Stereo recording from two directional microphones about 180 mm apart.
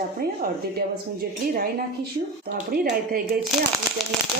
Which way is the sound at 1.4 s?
55° right (ahead or behind).